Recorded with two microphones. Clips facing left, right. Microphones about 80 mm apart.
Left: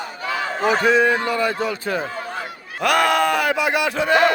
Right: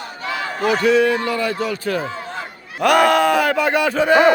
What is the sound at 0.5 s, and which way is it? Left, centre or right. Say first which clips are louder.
A man's voice: right 1 dB; left.